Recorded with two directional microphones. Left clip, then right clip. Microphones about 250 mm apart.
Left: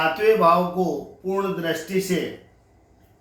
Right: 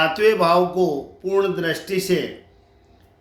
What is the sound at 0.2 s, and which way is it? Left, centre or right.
Speech, right.